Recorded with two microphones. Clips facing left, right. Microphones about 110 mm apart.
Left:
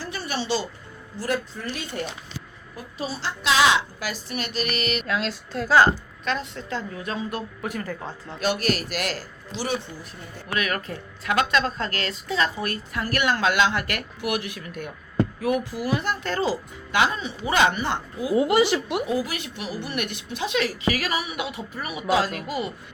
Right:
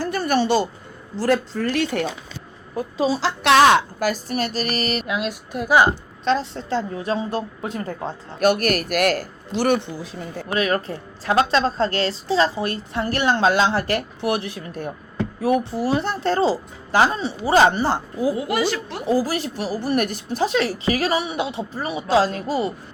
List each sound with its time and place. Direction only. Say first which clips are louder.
0.0 s a sound: right 10 dB; 50° right (ahead or behind)
1.1 s a woman's voice: right 7 dB; 85° right
3.1 s a woman's voice: right 7 dB; 90° right; by 5.0 s 40° right (ahead or behind)
5.0 s a woman's voice: right 2 dB; 15° right (ahead or behind)
6.2 s a woman's voice: right 7 dB; 30° right (ahead or behind)
8.4 s a woman's voice: right 6 dB; 55° right (ahead or behind); by 10.2 s 75° right (ahead or behind)
10.5 s a woman's voice: right 5 dB; 30° right (ahead or behind)
18.3 s speech: left 3 dB; 25° left (ahead or behind)
19.0 s a woman's voice: right 6 dB; 35° right (ahead or behind)